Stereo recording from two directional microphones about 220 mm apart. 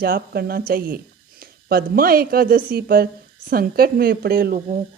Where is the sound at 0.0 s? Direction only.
45° right (ahead or behind).